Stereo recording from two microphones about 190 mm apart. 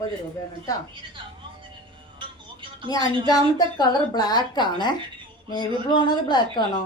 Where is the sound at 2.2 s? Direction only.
25° right (ahead or behind).